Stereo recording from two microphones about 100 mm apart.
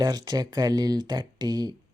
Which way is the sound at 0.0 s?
40° right (ahead or behind).